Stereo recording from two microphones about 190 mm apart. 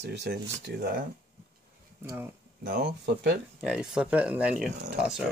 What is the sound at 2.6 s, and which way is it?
Speech, 60° right (ahead or behind).